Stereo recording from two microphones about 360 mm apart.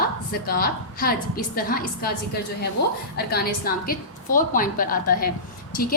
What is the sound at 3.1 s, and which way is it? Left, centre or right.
A woman's voice, left.